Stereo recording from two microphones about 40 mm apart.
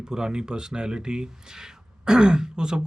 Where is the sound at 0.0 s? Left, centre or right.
Centre.